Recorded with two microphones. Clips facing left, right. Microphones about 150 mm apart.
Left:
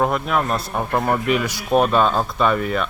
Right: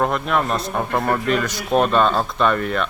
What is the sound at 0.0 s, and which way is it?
A man's voice, 5° left (ahead or behind).